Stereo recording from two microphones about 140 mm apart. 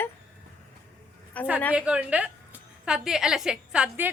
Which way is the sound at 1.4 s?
10° left (ahead or behind).